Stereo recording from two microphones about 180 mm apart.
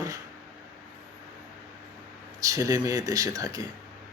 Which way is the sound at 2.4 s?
20° right (ahead or behind).